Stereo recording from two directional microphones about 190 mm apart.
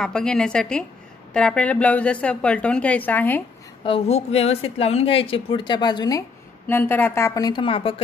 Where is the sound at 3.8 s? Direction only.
30° left (ahead or behind).